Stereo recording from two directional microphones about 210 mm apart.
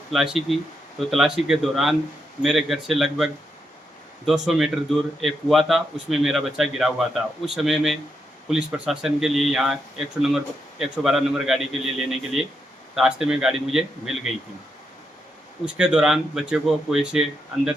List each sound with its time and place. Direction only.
0.1 s speech: centre (ahead or behind)
4.3 s speech: centre (ahead or behind)
15.6 s speech: 5° right (ahead or behind)